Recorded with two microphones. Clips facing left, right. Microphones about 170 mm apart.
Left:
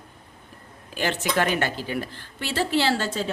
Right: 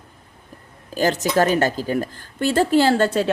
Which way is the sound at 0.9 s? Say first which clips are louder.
Right 6 dB; 40° right (ahead or behind).